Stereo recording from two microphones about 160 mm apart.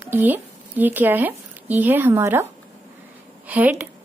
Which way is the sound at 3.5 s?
10° right (ahead or behind).